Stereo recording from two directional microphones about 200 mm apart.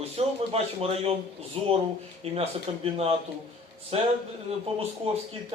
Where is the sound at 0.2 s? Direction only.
30° right (ahead or behind).